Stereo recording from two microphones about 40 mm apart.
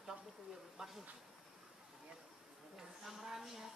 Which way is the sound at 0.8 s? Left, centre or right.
Centre.